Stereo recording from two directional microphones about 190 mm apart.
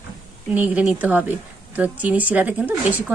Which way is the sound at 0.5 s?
10° right (ahead or behind).